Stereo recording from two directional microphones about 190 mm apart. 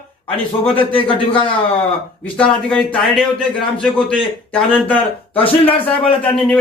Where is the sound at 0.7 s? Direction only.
25° left (ahead or behind).